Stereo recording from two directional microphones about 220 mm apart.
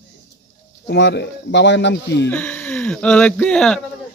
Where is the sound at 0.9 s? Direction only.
50° left (ahead or behind).